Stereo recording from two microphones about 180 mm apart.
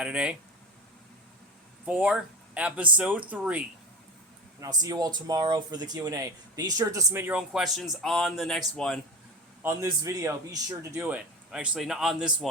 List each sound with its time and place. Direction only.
0.0 s a man's voice: 5° right (ahead or behind)
1.8 s speech: 5° right (ahead or behind)
4.6 s speech: 20° right (ahead or behind); by 9.0 s centre (ahead or behind)
9.6 s speech: 20° right (ahead or behind)
11.0 s a man's voice: 5° right (ahead or behind)